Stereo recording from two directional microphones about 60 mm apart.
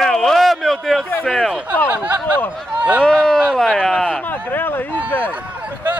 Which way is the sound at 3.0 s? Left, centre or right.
Centre.